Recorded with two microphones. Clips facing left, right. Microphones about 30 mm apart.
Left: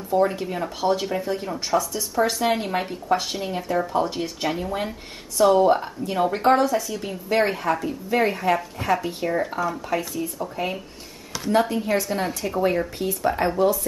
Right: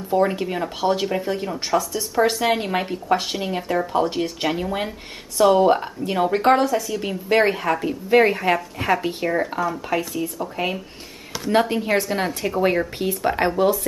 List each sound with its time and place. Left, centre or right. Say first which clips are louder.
0.1 s speech: right 1 dB; centre
7.3 s speech: right 3 dB; centre
7.8 s speech: right 5 dB; right
11.7 s speech: right 2 dB; right